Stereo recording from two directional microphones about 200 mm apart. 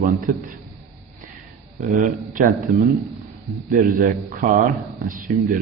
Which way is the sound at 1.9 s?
40° right (ahead or behind).